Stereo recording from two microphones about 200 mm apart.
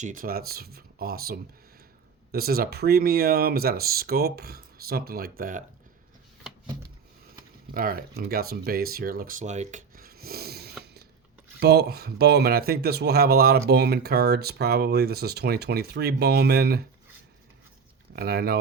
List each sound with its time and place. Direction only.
0.0 s speech: 40° right (ahead or behind)
7.7 s speech: 45° right (ahead or behind)
18.1 s speech: 50° right (ahead or behind)